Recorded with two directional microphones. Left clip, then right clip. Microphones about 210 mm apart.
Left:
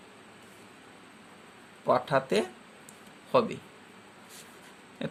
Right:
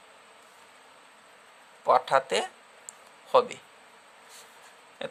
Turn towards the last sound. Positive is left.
turn(degrees=-15)  # may be behind; listen again after turning